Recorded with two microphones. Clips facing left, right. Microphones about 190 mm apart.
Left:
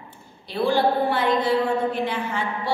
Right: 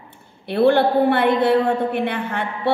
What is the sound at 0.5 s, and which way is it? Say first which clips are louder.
A woman's voice: right 5 dB; 60° right (ahead or behind).